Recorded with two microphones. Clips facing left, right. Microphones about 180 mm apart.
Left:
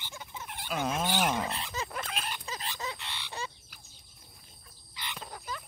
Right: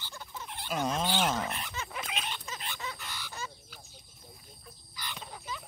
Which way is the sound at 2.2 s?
10° left (ahead or behind).